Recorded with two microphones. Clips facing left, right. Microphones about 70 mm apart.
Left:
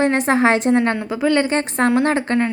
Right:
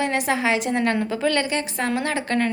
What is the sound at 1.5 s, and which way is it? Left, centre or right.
Speech, left.